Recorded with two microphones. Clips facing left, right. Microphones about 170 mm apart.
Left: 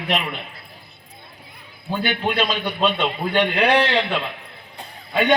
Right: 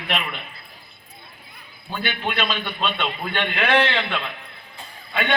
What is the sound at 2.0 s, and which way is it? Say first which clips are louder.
A man's voice: left 4 dB; 40° left (ahead or behind).